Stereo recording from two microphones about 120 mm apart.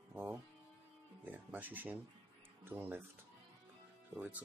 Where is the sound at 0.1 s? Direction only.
15° right (ahead or behind).